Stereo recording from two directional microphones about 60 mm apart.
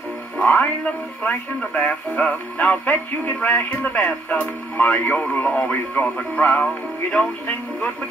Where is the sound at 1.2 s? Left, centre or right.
Left.